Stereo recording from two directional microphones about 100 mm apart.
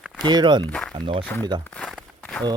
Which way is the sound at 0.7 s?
10° left (ahead or behind).